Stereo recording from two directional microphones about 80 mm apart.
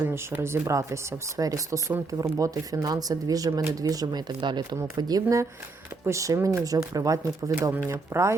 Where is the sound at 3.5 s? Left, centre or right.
Right.